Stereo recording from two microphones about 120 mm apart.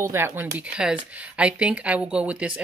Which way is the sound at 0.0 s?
20° right (ahead or behind).